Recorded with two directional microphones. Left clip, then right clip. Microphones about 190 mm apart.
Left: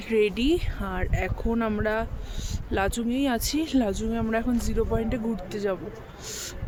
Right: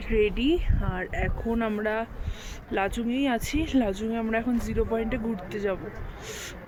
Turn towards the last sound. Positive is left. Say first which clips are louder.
# left 1 dB
turn(degrees=15)  # may be behind; listen again after turning